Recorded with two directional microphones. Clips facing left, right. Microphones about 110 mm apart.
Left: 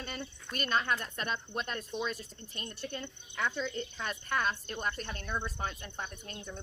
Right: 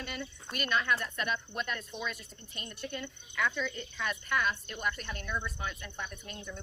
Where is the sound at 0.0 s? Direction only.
35° left (ahead or behind).